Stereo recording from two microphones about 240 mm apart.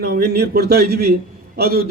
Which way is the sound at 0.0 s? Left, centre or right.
Right.